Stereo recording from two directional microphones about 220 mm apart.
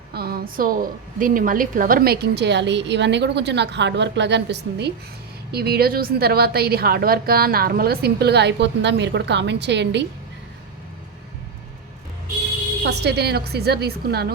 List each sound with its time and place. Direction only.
0.1 s a woman's voice: 45° right (ahead or behind)
12.8 s a woman's voice: 50° right (ahead or behind)